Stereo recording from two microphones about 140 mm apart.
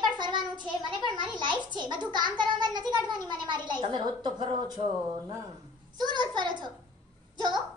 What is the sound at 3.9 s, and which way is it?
Speech, 30° right (ahead or behind).